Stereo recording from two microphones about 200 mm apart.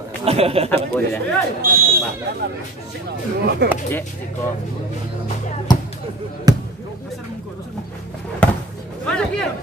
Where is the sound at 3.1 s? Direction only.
55° right (ahead or behind).